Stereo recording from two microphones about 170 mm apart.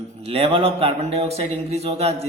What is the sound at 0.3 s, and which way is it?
Speech, 35° right (ahead or behind).